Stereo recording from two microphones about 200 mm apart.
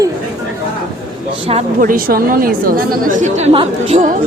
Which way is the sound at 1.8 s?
45° right (ahead or behind).